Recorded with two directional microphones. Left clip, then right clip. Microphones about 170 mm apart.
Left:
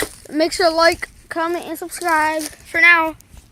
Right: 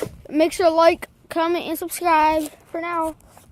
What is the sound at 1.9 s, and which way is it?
Speech, 35° right (ahead or behind).